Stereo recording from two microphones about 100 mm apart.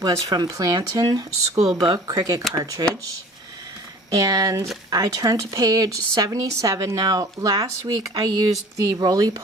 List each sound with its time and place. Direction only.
0.0 s a woman's voice: 40° right (ahead or behind)
4.1 s a woman's voice: 40° right (ahead or behind)